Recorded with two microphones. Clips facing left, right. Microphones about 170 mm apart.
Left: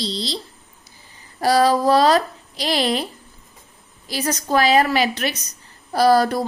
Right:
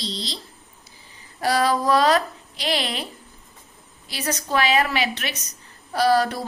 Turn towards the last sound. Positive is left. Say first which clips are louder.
# left 4 dB
turn(degrees=40)  # may be behind; listen again after turning